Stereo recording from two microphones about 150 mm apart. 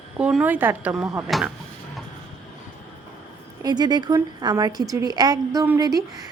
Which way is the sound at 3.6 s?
30° right (ahead or behind).